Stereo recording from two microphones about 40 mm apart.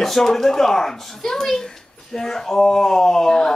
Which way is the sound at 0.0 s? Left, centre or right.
Centre.